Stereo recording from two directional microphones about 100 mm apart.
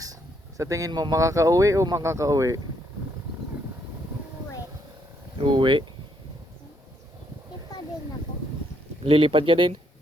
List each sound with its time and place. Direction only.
0.0 s speech: 35° right (ahead or behind)
5.4 s speech: 55° right (ahead or behind)
9.0 s speech: 65° right (ahead or behind)